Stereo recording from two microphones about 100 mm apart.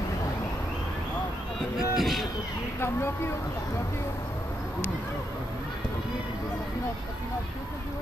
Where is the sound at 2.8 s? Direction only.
25° left (ahead or behind).